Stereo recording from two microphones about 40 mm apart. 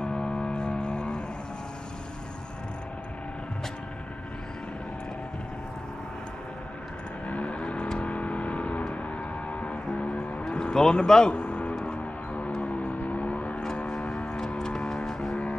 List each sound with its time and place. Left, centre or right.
0.0 s a sound: centre
7.2 s vehicle: left
9.5 s music: left
9.8 s vehicle: left
10.5 s speech: centre
11.3 s music: left
12.0 s music: left
12.6 s vehicle: left
13.8 s music: centre